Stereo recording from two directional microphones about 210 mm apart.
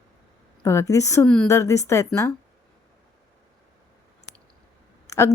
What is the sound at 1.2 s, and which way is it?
A woman's voice, 5° left (ahead or behind).